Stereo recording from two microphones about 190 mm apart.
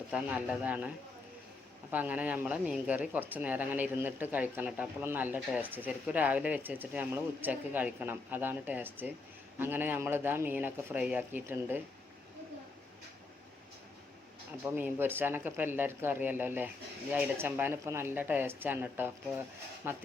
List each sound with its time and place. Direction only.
0.1 s speech: 5° right (ahead or behind)
1.9 s speech: 10° right (ahead or behind)
14.6 s speech: 10° right (ahead or behind)